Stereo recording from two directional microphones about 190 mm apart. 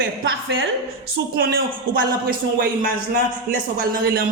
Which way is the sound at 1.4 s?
50° right (ahead or behind).